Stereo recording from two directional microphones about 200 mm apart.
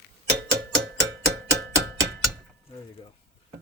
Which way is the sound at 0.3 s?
60° right (ahead or behind).